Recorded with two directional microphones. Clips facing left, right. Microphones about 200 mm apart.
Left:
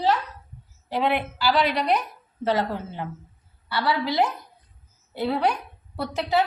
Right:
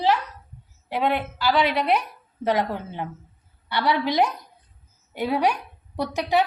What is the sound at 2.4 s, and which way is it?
A woman's voice, 15° right (ahead or behind).